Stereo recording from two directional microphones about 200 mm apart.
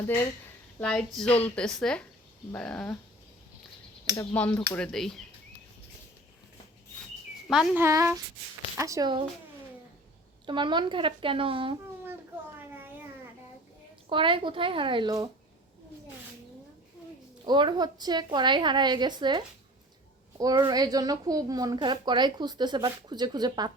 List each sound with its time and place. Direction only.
0.8 s a woman's voice: 5° left (ahead or behind)
4.4 s a woman's voice: 5° left (ahead or behind)
7.4 s speech: centre (ahead or behind)
7.8 s speech: 15° right (ahead or behind)
10.4 s a woman's voice: 25° right (ahead or behind)
12.5 s a sound: 10° right (ahead or behind)
14.1 s a woman's voice: 25° right (ahead or behind)
17.4 s a woman's voice: 20° right (ahead or behind)
20.4 s a woman's voice: 20° right (ahead or behind)